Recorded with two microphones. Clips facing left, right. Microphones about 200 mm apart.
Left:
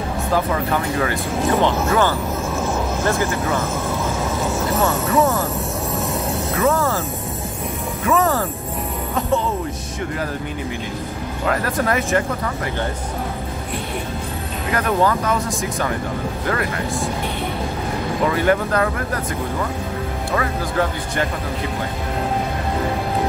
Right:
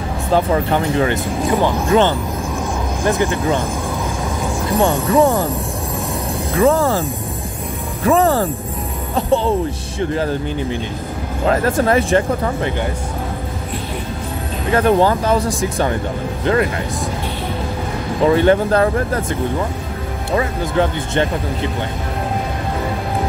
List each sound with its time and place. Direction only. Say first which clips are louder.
0.3 s speech: right 5 dB; 30° right (ahead or behind)
1.6 s speech: right 2 dB; 10° right (ahead or behind)
2.6 s vehicle: right 2 dB; 15° right (ahead or behind)
4.7 s speech: right 5 dB; 30° right (ahead or behind)
6.5 s speech: right 5 dB; 30° right (ahead or behind)
11.4 s speech: right 5 dB; 25° right (ahead or behind)
14.7 s speech: right 5 dB; 30° right (ahead or behind)
18.2 s speech: right 6 dB; 30° right (ahead or behind)
20.3 s speech: right 4 dB; 25° right (ahead or behind)